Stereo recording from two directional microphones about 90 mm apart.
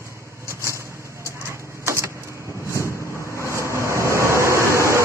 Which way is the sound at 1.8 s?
30° right (ahead or behind).